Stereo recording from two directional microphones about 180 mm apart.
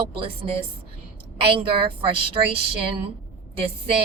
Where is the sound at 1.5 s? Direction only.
30° right (ahead or behind).